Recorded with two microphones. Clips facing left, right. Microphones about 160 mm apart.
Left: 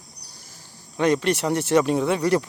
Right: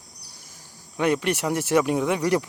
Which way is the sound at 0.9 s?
10° right (ahead or behind).